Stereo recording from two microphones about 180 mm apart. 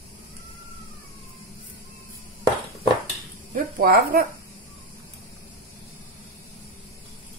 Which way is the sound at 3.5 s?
55° right (ahead or behind).